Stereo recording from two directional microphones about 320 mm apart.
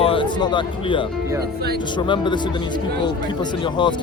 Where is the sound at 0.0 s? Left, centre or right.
Centre.